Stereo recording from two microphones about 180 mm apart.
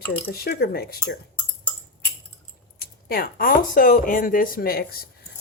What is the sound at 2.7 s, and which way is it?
Speech, 55° left (ahead or behind).